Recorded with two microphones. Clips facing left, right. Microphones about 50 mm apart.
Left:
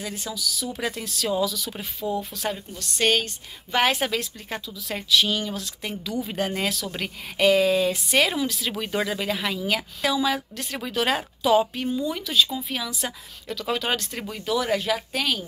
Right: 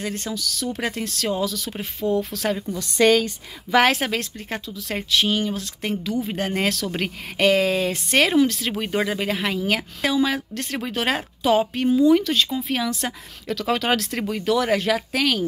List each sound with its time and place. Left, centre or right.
0.0 s speech: right
2.0 s speech: right
3.8 s a woman's voice: right
4.1 s a woman's voice: right
6.6 s speech: right
7.0 s speech: right
8.7 s speech: right
10.5 s speech: right
10.8 s a woman's voice: right
11.9 s speech: right
14.3 s speech: right